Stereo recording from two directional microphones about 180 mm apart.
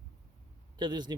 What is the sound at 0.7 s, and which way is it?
Speech, 25° right (ahead or behind).